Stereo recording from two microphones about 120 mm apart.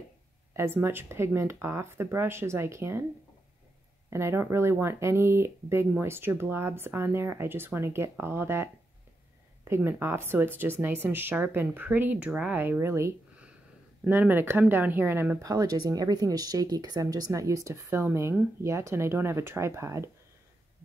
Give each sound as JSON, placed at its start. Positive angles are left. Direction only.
{"t": 0.6, "sound": "speech", "side_deg": -20}
{"t": 4.1, "sound": "speech", "side_deg": -20}
{"t": 9.7, "sound": "speech", "side_deg": -20}